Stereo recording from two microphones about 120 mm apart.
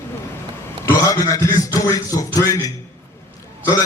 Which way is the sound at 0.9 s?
30° left (ahead or behind).